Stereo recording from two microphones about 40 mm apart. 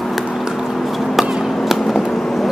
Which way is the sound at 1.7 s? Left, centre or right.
Centre.